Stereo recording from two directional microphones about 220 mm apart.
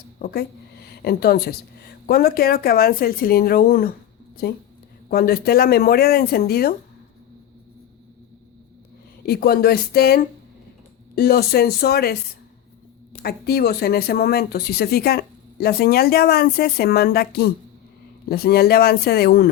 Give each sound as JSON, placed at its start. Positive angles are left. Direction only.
{"t": 0.2, "sound": "speech", "side_deg": 45}
{"t": 5.1, "sound": "speech", "side_deg": 45}
{"t": 9.2, "sound": "speech", "side_deg": 45}
{"t": 13.2, "sound": "speech", "side_deg": 45}